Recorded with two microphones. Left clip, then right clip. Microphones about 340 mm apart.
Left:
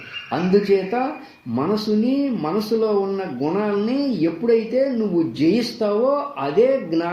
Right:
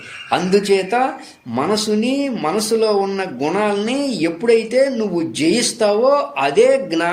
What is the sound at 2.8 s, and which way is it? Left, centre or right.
Speech, right.